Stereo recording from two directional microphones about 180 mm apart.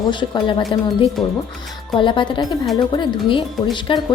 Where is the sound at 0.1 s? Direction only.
25° left (ahead or behind).